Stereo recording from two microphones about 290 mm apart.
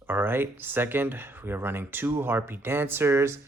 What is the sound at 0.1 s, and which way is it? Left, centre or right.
Speech, centre.